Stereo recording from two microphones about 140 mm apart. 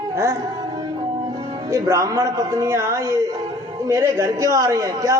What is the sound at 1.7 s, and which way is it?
A man's voice, 20° right (ahead or behind).